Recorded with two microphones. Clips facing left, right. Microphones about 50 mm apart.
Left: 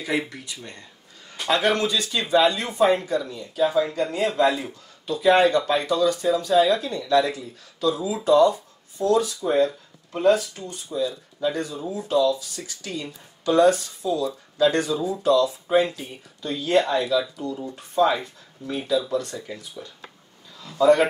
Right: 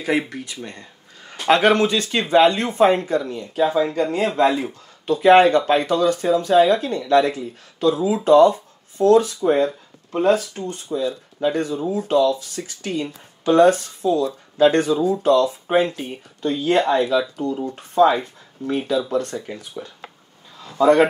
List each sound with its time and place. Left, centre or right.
0.3 s a man's voice: right